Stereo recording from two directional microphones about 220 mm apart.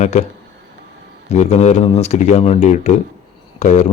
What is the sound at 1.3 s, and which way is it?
A man's voice, 30° left (ahead or behind).